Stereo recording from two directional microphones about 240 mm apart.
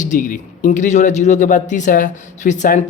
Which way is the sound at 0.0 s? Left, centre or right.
Left.